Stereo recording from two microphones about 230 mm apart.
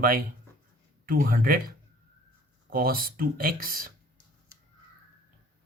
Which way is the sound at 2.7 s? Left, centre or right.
Right.